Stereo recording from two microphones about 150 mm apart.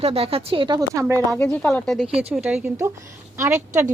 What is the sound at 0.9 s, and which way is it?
Speech, 20° right (ahead or behind).